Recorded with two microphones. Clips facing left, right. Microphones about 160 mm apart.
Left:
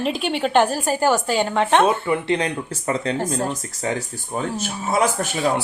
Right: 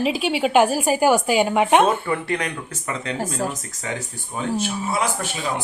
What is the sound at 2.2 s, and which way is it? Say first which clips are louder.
Speech: left 4 dB; 25° left (ahead or behind).